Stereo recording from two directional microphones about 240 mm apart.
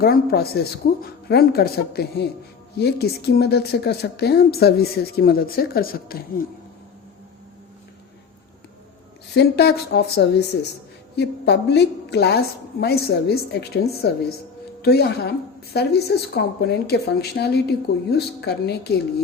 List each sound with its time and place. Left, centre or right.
0.0 s a woman's voice: left
9.3 s a woman's voice: left